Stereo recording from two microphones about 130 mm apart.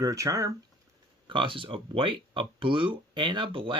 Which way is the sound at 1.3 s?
40° right (ahead or behind).